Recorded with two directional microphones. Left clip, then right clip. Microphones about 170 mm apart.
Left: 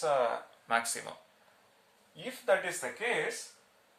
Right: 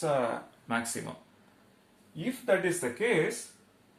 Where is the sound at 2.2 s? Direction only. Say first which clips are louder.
Right 2 dB; 15° left (ahead or behind).